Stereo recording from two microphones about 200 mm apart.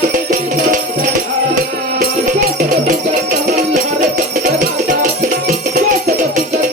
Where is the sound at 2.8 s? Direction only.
40° right (ahead or behind).